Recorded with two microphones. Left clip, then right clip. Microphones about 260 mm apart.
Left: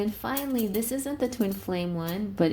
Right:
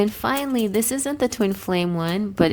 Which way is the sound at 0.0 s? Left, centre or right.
Right.